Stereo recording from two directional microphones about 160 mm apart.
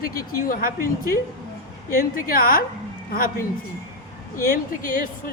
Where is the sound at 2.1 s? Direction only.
65° left (ahead or behind).